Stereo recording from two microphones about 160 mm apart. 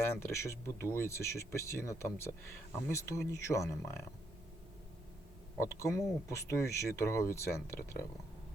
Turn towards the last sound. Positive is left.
turn(degrees=15)  # may be behind; listen again after turning